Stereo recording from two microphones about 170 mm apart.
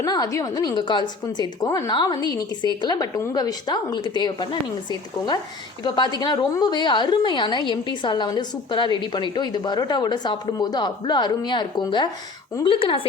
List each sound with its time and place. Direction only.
0.0 s a woman's voice: 20° left (ahead or behind)